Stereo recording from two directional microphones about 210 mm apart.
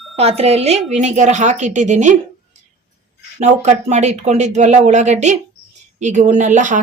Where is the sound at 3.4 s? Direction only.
35° right (ahead or behind).